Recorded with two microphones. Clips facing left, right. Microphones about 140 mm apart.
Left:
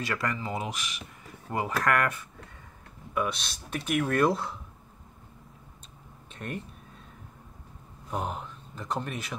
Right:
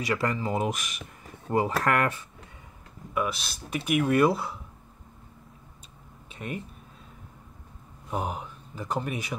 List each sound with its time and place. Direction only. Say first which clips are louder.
0.0 s speech: right 4 dB; 20° right (ahead or behind)
0.5 s speech: right 5 dB; 45° right (ahead or behind)
1.5 s speech: right 3 dB; 30° right (ahead or behind)
3.2 s speech: right 1 dB; 5° right (ahead or behind)
6.2 s a sound: right 1 dB; 5° right (ahead or behind)
8.1 s speech: right 2 dB; 5° right (ahead or behind)